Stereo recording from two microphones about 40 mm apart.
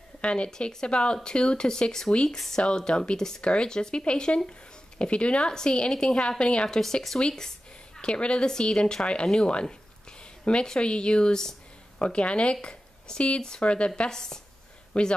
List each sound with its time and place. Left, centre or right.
0.2 s speech: left; by 2.6 s centre
2.6 s speech: centre
6.8 s speech: centre
7.2 s speech: centre
13.6 s speech: left
14.1 s speech: centre
14.9 s speech: left